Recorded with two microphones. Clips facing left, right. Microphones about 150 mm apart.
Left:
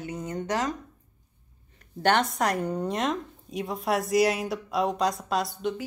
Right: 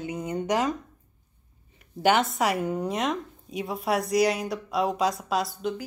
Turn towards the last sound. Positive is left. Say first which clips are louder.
# even
turn(degrees=0)  # may be behind; listen again after turning